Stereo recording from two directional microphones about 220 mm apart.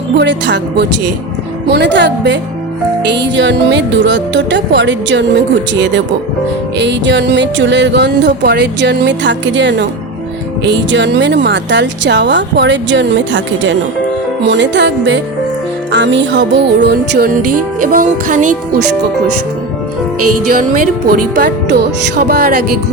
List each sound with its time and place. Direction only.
0.2 s speech: 55° right (ahead or behind)
6.7 s speech: 55° right (ahead or behind)
17.4 s music: 90° right
17.9 s speech: 35° right (ahead or behind)
20.1 s music: 90° right
20.5 s speech: 40° right (ahead or behind)